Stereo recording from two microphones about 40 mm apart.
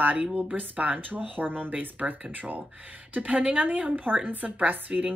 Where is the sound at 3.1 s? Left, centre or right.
Right.